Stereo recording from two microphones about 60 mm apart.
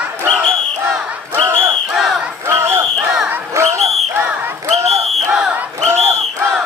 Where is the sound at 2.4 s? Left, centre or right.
Right.